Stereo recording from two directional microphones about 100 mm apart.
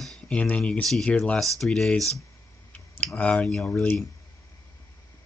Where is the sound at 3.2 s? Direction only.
15° left (ahead or behind).